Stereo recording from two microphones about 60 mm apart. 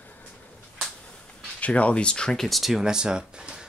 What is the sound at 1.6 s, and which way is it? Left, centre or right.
Speech, left.